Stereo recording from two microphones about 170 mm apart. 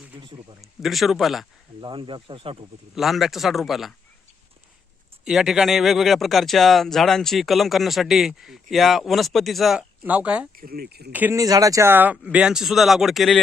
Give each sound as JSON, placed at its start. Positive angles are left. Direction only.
{"t": 0.2, "sound": "a man's voice", "side_deg": -30}
{"t": 0.6, "sound": "speech", "side_deg": 0}
{"t": 1.8, "sound": "speech", "side_deg": -30}
{"t": 2.9, "sound": "speech", "side_deg": 0}
{"t": 5.2, "sound": "speech", "side_deg": -5}
{"t": 10.5, "sound": "speech", "side_deg": -60}
{"t": 11.1, "sound": "speech", "side_deg": -15}